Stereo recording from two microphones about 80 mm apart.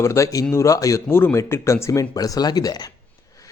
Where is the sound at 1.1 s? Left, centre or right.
Left.